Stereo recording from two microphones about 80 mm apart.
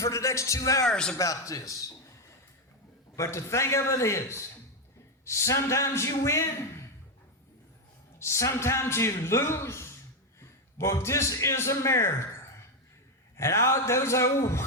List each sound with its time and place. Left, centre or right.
0.0 s a man's voice: left
0.9 s a man's voice: centre
1.1 s a man's voice: left
3.2 s a man's voice: left
8.2 s a man's voice: left